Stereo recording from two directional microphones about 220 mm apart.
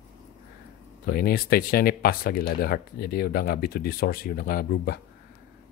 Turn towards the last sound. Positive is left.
turn(degrees=45)  # may be behind; listen again after turning